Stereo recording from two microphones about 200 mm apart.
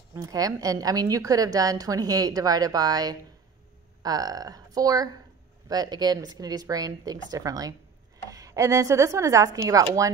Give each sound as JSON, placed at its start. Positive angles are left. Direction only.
{"t": 0.1, "sound": "a woman's voice", "side_deg": -20}